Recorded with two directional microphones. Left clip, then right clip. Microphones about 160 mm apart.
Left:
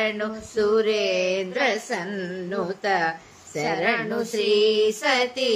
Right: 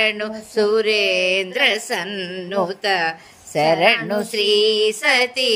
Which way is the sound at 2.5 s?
40° right (ahead or behind).